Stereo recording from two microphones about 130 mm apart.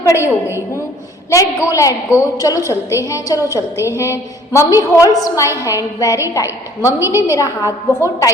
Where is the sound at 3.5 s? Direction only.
20° right (ahead or behind).